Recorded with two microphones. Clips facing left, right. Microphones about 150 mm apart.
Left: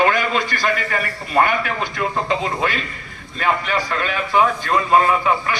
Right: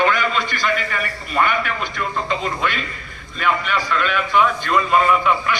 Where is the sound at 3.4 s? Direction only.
40° left (ahead or behind).